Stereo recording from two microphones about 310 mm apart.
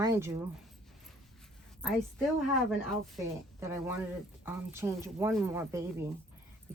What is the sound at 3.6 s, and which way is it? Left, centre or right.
Speech, centre.